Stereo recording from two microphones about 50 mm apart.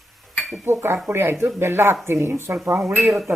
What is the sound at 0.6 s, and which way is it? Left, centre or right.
Speech, right.